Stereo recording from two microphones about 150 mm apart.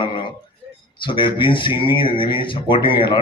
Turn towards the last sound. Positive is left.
turn(degrees=35)  # may be behind; listen again after turning